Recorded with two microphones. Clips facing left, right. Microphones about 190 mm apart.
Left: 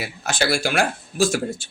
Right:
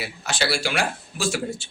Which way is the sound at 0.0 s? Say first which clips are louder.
Left 3 dB; 50° left (ahead or behind).